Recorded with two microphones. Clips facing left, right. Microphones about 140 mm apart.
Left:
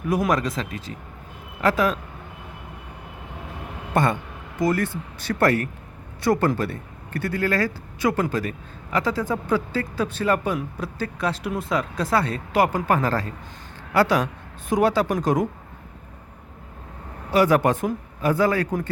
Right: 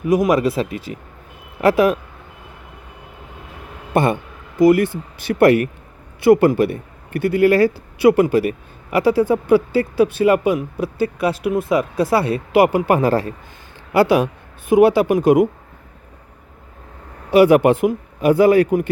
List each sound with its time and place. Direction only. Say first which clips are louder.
0.0 s speech: right 7 dB; centre (ahead or behind)
3.9 s speech: right 5 dB; 20° right (ahead or behind)
6.3 s speech: right 8 dB; 5° right (ahead or behind)
6.6 s speech: right 9 dB; 20° right (ahead or behind)
10.2 s speech: right 7 dB; 10° right (ahead or behind)
17.3 s speech: right 7 dB; 15° right (ahead or behind)